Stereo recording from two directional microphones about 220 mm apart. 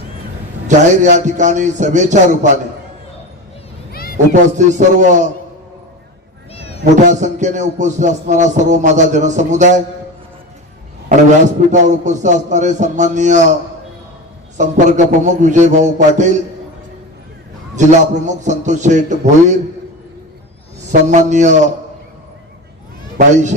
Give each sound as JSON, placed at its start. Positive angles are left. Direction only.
{"t": 0.7, "sound": "music", "side_deg": -35}
{"t": 4.3, "sound": "music", "side_deg": -35}
{"t": 6.5, "sound": "a sound", "side_deg": 25}
{"t": 7.1, "sound": "music", "side_deg": -35}
{"t": 11.4, "sound": "music", "side_deg": -35}
{"t": 14.6, "sound": "music", "side_deg": -35}
{"t": 17.7, "sound": "music", "side_deg": -35}
{"t": 20.9, "sound": "music", "side_deg": -35}
{"t": 23.1, "sound": "speech", "side_deg": -35}